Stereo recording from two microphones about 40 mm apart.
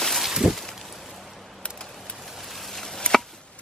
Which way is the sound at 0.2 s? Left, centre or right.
Centre.